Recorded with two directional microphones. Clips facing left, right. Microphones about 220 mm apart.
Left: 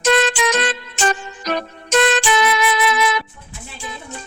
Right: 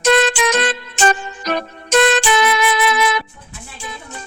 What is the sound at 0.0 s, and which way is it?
Music, 50° right (ahead or behind).